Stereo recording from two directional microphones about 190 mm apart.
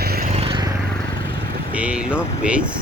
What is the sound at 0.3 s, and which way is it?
Vehicle, 25° right (ahead or behind).